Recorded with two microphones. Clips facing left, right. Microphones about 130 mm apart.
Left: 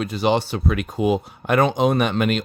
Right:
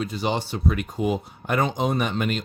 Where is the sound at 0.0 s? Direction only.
75° left (ahead or behind).